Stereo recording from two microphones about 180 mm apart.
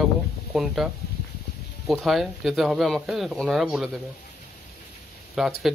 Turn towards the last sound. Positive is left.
turn(degrees=0)  # may be behind; listen again after turning